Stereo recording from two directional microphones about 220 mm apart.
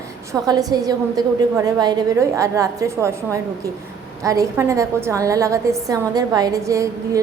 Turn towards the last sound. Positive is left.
turn(degrees=-15)  # may be behind; listen again after turning